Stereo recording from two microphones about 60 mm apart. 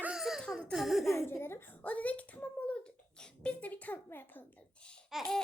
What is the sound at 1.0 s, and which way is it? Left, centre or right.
Speech, left.